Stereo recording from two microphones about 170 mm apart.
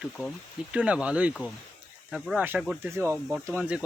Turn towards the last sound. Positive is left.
turn(degrees=-5)  # may be behind; listen again after turning